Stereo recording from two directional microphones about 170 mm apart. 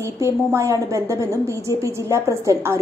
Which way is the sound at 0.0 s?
15° right (ahead or behind).